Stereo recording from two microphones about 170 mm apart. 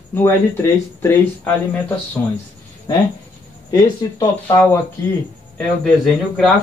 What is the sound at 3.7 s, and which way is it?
Speech, 20° left (ahead or behind).